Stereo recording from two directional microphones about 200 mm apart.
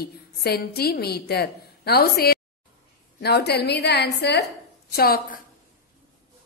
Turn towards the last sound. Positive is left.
turn(degrees=50)  # may be behind; listen again after turning